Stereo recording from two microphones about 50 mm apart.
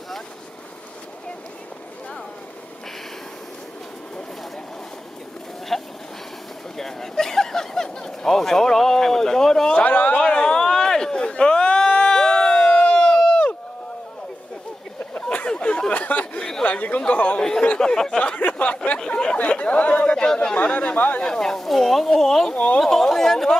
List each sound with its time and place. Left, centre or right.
5.7 s a sound: centre
9.8 s a sound: left
10.1 s a sound: centre
13.3 s run: left
15.1 s a sound: left
15.9 s chatter: left
16.3 s chatter: centre
16.6 s speech: left; by 18.3 s centre
18.3 s speech: left
19.0 s speech: centre
20.5 s speech: left
21.2 s speech: centre
22.5 s speech: left
22.8 s speech: centre